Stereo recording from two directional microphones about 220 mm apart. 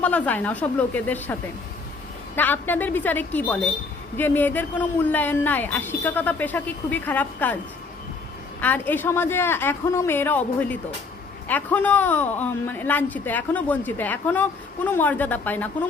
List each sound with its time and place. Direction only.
0.0 s speech: 5° left (ahead or behind)
8.6 s speech: 10° left (ahead or behind)